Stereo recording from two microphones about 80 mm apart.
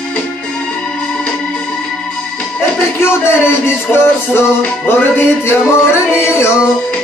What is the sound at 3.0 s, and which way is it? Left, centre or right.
Music, left.